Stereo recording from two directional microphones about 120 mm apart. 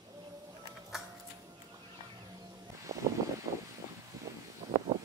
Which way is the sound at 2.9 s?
25° right (ahead or behind).